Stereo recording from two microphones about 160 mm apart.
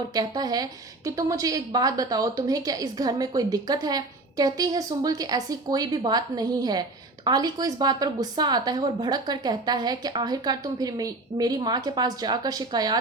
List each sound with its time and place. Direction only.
0.1 s a woman's voice: 25° right (ahead or behind)